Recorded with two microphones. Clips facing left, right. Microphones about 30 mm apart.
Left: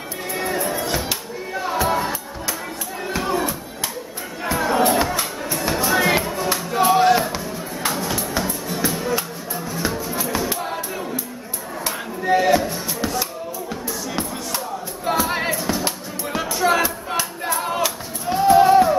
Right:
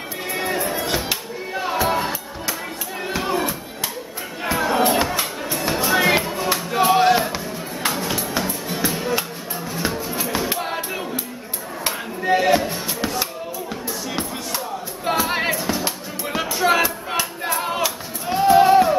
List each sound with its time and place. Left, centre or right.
0.3 s music: centre
12.2 s music: centre
15.0 s music: centre
17.2 s choir: centre
17.8 s music: centre